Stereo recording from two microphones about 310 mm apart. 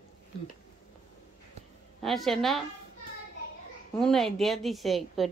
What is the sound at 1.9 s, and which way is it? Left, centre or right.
Speech, centre.